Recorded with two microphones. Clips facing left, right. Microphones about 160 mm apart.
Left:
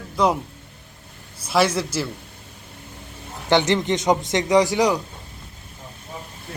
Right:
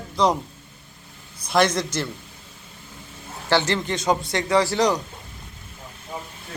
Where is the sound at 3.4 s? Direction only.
20° left (ahead or behind).